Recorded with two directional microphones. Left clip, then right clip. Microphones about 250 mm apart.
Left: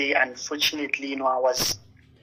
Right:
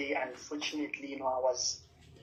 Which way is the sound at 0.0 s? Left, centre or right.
Left.